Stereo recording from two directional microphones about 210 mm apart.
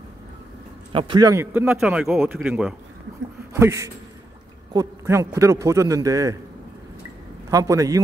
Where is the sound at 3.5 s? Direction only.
15° right (ahead or behind).